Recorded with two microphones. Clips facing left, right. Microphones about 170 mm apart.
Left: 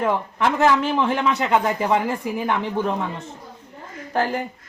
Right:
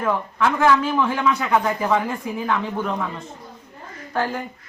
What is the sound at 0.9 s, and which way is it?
A man's voice, 25° left (ahead or behind).